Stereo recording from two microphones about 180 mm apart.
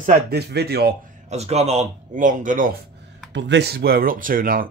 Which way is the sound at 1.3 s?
35° right (ahead or behind).